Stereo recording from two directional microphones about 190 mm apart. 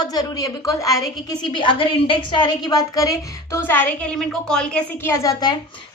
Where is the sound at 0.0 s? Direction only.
20° left (ahead or behind).